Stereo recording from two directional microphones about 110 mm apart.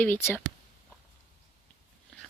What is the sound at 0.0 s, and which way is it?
Speech, 15° left (ahead or behind).